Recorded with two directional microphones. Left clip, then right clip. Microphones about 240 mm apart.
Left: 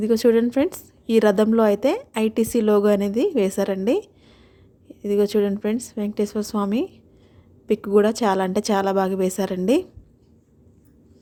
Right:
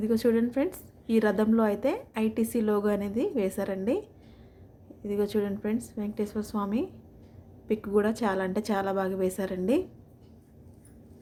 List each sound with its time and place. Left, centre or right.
0.0 s a woman's voice: left